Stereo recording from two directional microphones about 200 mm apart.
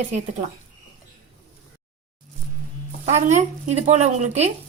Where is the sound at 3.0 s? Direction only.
35° right (ahead or behind).